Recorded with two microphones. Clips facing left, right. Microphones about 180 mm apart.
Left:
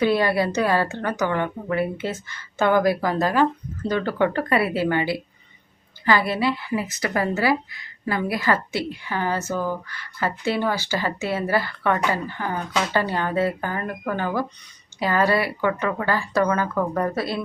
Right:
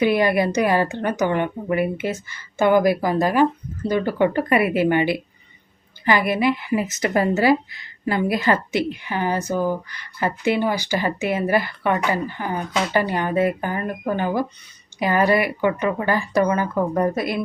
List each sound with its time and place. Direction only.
0.0 s a woman's voice: 15° right (ahead or behind)